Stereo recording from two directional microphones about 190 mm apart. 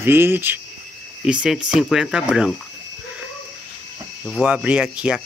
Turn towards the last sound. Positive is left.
turn(degrees=-5)  # may be behind; listen again after turning